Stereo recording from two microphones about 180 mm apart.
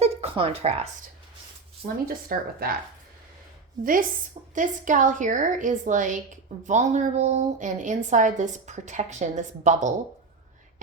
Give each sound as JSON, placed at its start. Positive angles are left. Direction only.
{"t": 0.0, "sound": "a sound", "side_deg": -35}
{"t": 1.8, "sound": "speech", "side_deg": -55}
{"t": 4.5, "sound": "a woman's voice", "side_deg": -45}